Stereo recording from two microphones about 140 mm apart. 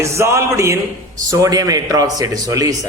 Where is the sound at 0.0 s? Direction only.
20° right (ahead or behind).